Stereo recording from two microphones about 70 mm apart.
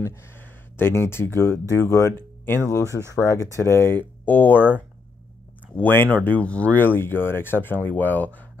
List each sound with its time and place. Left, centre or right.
0.0 s speech: left
5.8 s speech: left
6.8 s speech: left